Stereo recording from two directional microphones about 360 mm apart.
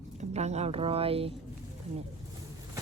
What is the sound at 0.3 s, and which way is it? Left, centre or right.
Speech, centre.